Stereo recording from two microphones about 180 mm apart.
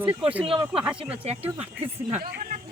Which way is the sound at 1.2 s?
35° right (ahead or behind).